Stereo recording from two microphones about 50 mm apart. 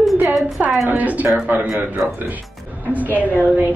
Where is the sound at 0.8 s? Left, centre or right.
Right.